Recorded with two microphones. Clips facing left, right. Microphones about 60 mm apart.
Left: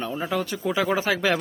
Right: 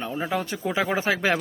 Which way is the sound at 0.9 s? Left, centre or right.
Right.